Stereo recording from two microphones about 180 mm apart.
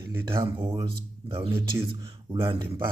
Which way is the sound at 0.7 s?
30° right (ahead or behind).